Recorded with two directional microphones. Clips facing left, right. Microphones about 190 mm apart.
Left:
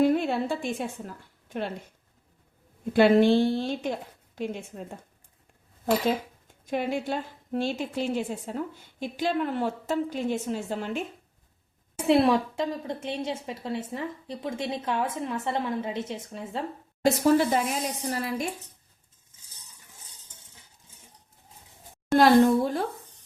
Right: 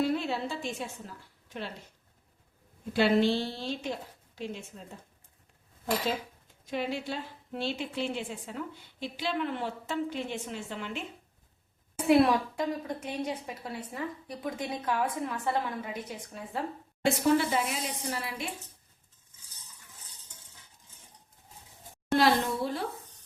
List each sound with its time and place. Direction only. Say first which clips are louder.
0.0 s a woman's voice: left 6 dB; 50° left (ahead or behind)
2.9 s a woman's voice: left 6 dB; 55° left (ahead or behind)
6.7 s a woman's voice: left 5 dB; 50° left (ahead or behind)
12.0 s a woman's voice: left 2 dB; 25° left (ahead or behind)
17.0 s speech: left 4 dB; 40° left (ahead or behind)
22.2 s a woman's voice: left 9 dB; 50° left (ahead or behind)